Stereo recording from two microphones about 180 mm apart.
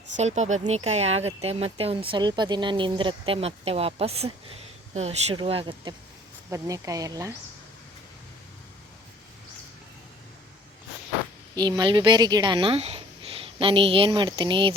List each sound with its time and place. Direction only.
0.2 s speech: 40° right (ahead or behind)
6.5 s speech: 20° right (ahead or behind)
11.5 s speech: 25° right (ahead or behind)